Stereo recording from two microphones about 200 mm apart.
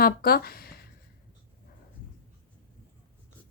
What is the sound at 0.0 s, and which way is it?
Speech, 50° left (ahead or behind).